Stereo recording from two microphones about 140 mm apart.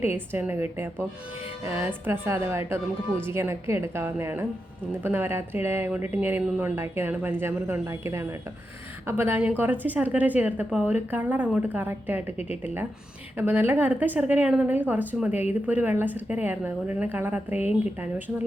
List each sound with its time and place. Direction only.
0.3 s speech: 15° right (ahead or behind)